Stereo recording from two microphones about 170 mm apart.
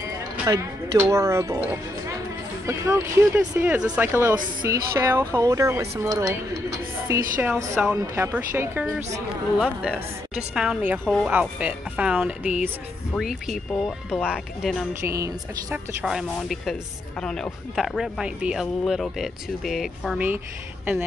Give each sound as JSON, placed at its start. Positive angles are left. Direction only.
{"t": 0.5, "sound": "speech", "side_deg": -15}
{"t": 15.0, "sound": "speech", "side_deg": -20}
{"t": 16.0, "sound": "speech", "side_deg": -5}